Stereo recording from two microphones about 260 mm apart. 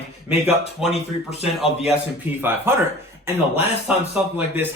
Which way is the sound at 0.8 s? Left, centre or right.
Centre.